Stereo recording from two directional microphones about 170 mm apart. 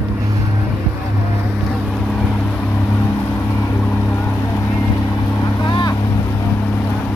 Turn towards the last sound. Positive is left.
turn(degrees=25)  # may be behind; listen again after turning